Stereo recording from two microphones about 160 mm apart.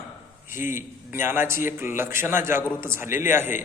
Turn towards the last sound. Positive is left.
turn(degrees=-15)  # may be behind; listen again after turning